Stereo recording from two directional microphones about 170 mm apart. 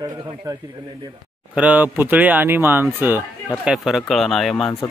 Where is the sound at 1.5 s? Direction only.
10° right (ahead or behind).